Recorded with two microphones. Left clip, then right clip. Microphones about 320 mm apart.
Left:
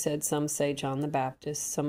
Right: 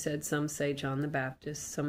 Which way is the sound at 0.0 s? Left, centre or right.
Centre.